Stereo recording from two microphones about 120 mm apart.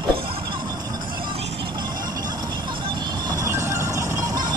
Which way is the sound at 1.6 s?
35° right (ahead or behind).